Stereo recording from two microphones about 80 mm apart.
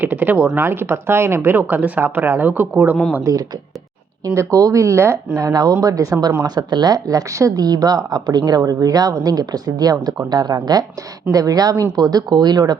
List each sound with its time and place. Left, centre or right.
0.0 s speech: right
4.4 s speech: right